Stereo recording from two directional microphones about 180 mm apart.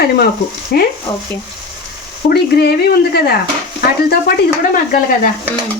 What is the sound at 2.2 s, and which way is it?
Speech, 60° left (ahead or behind).